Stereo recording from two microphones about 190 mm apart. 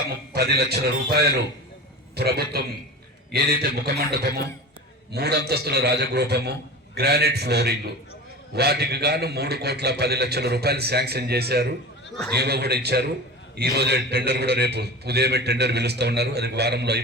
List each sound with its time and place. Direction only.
0.3 s a man's voice: 55° right (ahead or behind)